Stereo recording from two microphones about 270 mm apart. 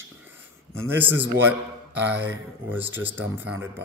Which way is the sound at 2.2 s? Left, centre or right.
Centre.